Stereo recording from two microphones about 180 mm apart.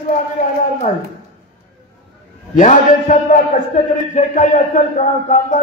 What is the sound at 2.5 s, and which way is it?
A man's voice, 45° left (ahead or behind).